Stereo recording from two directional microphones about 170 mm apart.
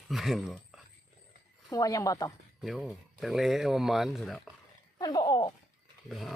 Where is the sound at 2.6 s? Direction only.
Centre (ahead or behind).